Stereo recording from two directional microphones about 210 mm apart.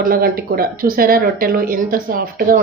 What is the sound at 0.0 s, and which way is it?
A woman's voice, 45° right (ahead or behind).